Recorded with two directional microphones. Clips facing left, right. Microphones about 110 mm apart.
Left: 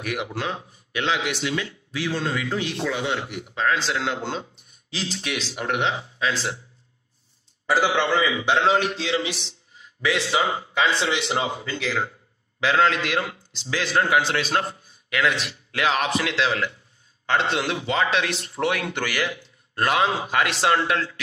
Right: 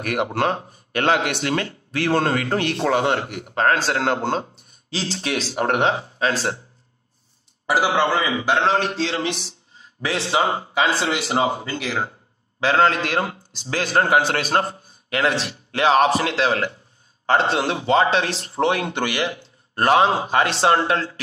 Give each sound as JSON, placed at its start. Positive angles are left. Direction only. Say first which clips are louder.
{"t": 0.0, "sound": "speech", "louder": "right 7 dB", "side_deg": -55}
{"t": 4.9, "sound": "speech", "louder": "right 4 dB", "side_deg": -35}
{"t": 7.8, "sound": "speech", "louder": "right 2 dB", "side_deg": -40}
{"t": 11.5, "sound": "speech", "louder": "right 3 dB", "side_deg": -45}
{"t": 11.8, "sound": "speech", "louder": "left 1 dB", "side_deg": -20}
{"t": 12.1, "sound": "a man's voice", "louder": "right 2 dB", "side_deg": -35}